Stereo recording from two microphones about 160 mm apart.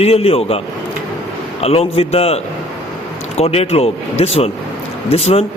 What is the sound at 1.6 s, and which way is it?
A man's voice, 40° left (ahead or behind).